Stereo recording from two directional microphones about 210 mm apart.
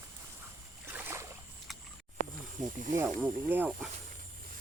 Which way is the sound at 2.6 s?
35° right (ahead or behind).